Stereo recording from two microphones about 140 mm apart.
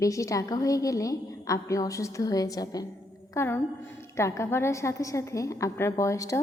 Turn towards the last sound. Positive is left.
turn(degrees=25)  # may be behind; listen again after turning